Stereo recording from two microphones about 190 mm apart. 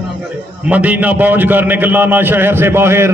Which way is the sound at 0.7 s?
10° right (ahead or behind).